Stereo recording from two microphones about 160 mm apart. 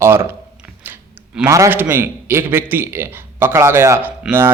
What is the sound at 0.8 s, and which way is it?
A man's voice, 10° right (ahead or behind).